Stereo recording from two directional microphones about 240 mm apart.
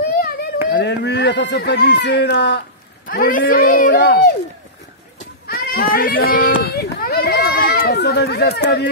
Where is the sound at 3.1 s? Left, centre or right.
Left.